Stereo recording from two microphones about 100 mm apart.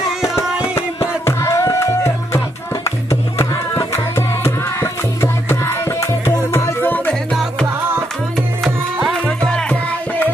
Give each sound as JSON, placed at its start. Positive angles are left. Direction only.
{"t": 0.4, "sound": "music", "side_deg": 30}
{"t": 8.6, "sound": "music", "side_deg": 0}
{"t": 9.2, "sound": "music", "side_deg": 10}